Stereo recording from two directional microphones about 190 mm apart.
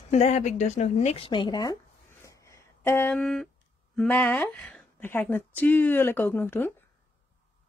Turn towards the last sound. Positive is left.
turn(degrees=10)  # may be behind; listen again after turning